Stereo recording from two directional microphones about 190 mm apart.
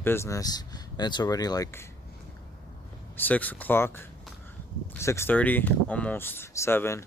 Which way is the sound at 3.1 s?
10° left (ahead or behind).